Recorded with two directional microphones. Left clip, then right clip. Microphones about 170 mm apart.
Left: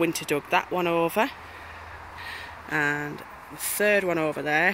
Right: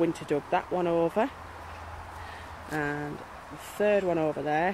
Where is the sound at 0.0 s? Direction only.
15° left (ahead or behind).